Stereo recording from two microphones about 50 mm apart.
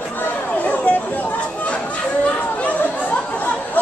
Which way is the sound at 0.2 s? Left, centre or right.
Left.